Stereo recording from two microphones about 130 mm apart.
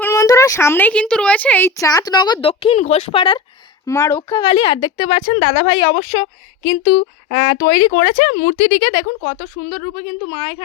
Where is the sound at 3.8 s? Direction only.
20° left (ahead or behind).